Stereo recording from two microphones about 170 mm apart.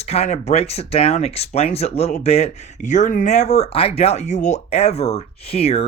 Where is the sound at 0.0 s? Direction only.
40° left (ahead or behind).